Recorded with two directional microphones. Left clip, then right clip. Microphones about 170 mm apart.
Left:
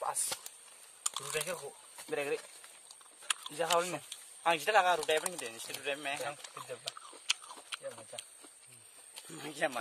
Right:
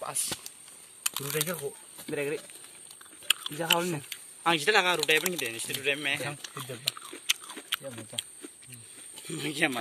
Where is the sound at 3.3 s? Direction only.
10° left (ahead or behind).